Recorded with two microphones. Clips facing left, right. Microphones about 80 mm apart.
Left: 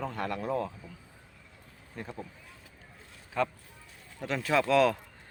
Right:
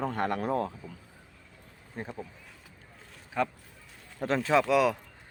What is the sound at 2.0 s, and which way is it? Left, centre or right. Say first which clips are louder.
Speech: right 2 dB; right.